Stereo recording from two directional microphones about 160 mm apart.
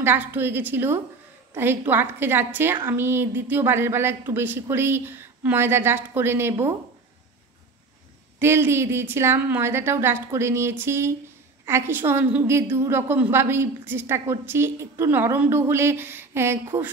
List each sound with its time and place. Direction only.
0.0 s a woman's voice: 10° right (ahead or behind)
8.4 s a woman's voice: 15° right (ahead or behind)